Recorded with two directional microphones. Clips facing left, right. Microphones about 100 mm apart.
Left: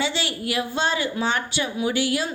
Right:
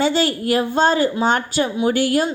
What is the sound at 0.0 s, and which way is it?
A woman's voice, 45° right (ahead or behind).